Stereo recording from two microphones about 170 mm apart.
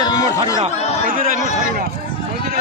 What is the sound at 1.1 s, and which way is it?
Speech, 55° right (ahead or behind).